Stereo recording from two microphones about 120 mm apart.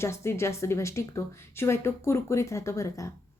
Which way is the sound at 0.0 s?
25° left (ahead or behind).